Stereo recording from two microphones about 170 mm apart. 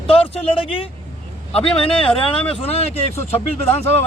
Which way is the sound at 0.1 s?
35° left (ahead or behind).